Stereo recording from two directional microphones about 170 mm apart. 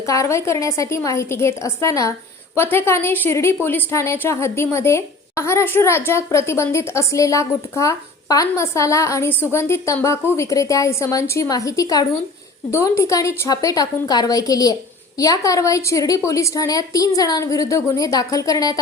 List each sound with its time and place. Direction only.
0.0 s a woman's voice: 20° left (ahead or behind)